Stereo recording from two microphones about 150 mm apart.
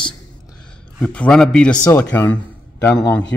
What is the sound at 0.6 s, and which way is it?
A man's voice, 5° left (ahead or behind).